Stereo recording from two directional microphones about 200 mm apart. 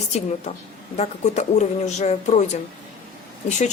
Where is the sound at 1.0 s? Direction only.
35° left (ahead or behind).